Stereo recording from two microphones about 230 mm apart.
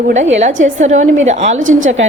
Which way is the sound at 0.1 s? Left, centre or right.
Right.